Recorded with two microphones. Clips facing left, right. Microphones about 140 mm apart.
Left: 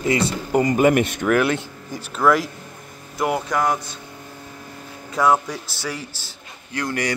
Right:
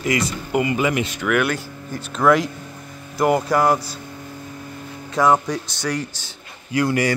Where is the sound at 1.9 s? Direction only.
10° left (ahead or behind); by 3.8 s 5° right (ahead or behind).